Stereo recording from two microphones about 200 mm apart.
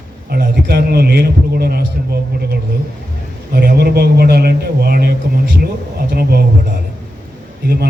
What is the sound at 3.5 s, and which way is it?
A man's voice, 50° right (ahead or behind).